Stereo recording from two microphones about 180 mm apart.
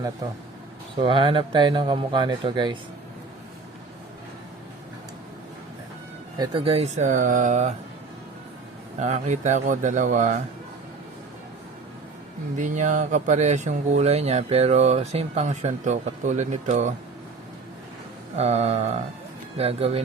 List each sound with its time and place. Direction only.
1.0 s speech: 30° right (ahead or behind)
6.4 s speech: 30° right (ahead or behind)
9.0 s speech: 40° right (ahead or behind)
12.5 s speech: 45° right (ahead or behind)
18.3 s speech: 35° right (ahead or behind)